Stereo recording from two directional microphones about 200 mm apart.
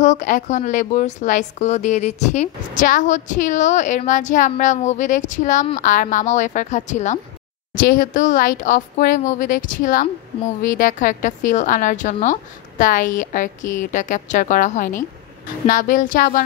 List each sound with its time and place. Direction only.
0.0 s speech: 40° left (ahead or behind)